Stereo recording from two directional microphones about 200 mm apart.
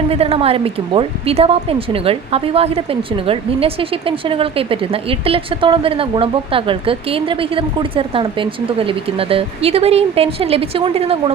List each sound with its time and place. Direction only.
0.1 s speech: 30° right (ahead or behind)